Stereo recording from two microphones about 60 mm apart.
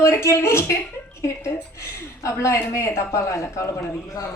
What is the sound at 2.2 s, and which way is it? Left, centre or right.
Speech, left.